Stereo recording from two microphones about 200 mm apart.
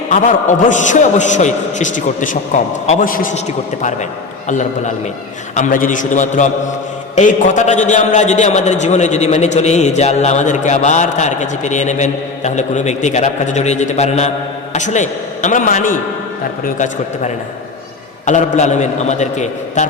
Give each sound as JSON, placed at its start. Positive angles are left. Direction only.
{"t": 0.1, "sound": "a man's voice", "side_deg": 40}
{"t": 5.5, "sound": "a man's voice", "side_deg": 40}
{"t": 18.3, "sound": "a man's voice", "side_deg": 35}